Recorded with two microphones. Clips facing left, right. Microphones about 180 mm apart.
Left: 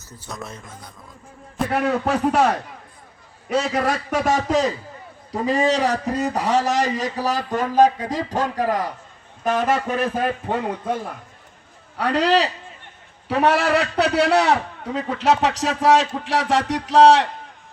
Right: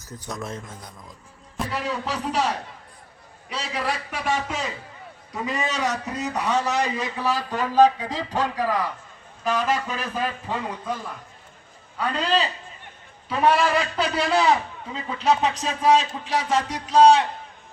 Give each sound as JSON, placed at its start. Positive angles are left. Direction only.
{"t": 1.7, "sound": "a man's voice", "side_deg": 55}
{"t": 11.9, "sound": "a man's voice", "side_deg": 75}